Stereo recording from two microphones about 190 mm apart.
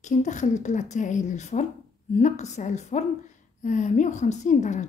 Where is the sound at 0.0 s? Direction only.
40° left (ahead or behind).